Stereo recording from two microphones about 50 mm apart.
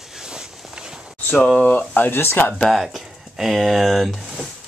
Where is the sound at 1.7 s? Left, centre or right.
Left.